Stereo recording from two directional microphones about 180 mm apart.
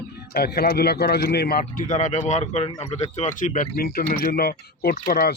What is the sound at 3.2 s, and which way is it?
Speech, 45° left (ahead or behind).